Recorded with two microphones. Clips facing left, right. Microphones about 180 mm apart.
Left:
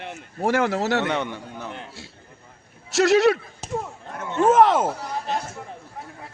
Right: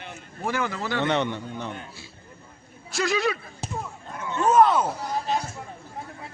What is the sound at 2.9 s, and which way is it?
Speech, 75° left (ahead or behind).